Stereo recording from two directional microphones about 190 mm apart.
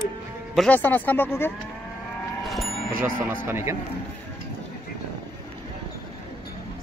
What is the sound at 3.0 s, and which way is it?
Speech, 10° right (ahead or behind).